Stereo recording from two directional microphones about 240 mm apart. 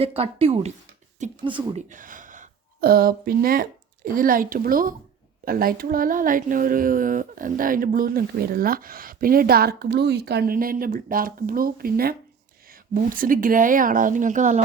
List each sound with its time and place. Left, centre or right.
0.0 s speech: right